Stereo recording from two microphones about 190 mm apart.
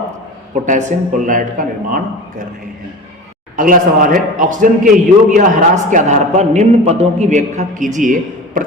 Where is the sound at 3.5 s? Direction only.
45° right (ahead or behind).